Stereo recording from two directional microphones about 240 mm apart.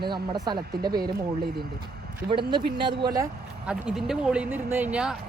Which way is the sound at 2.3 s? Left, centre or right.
Centre.